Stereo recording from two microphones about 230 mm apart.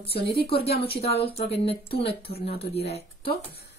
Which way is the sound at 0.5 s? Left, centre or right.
Left.